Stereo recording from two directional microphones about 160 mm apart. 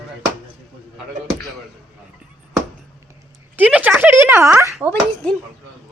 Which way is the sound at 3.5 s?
10° right (ahead or behind).